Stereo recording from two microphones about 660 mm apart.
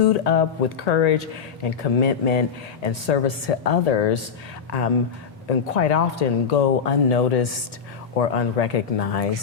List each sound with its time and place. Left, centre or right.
0.0 s speech: left
5.5 s speech: left